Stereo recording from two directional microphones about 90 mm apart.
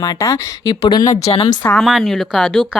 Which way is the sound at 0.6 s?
50° left (ahead or behind).